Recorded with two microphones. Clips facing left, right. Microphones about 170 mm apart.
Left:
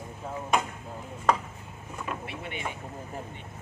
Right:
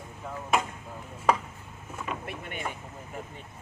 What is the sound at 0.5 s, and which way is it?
Speech, 5° right (ahead or behind).